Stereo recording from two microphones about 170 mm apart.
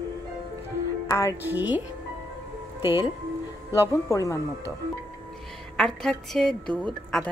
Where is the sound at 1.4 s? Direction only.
10° right (ahead or behind).